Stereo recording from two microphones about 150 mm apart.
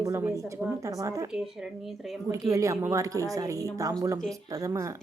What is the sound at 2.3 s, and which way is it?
A woman's voice, 20° right (ahead or behind).